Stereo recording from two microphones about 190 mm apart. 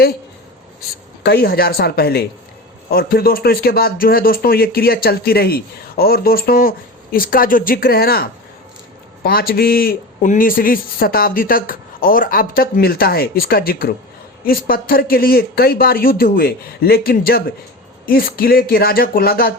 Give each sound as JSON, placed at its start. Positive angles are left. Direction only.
{"t": 1.2, "sound": "speech", "side_deg": 55}